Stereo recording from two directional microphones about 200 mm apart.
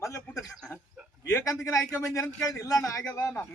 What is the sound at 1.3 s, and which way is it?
A man's voice, 15° left (ahead or behind).